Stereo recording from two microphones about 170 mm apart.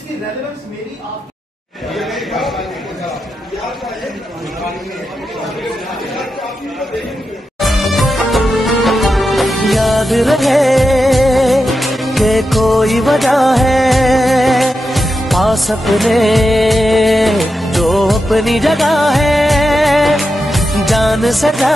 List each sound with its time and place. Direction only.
2.0 s chatter: centre (ahead or behind)
7.6 s music of bollywood: centre (ahead or behind)